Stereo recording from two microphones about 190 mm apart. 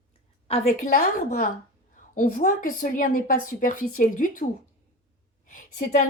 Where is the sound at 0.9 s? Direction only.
45° left (ahead or behind).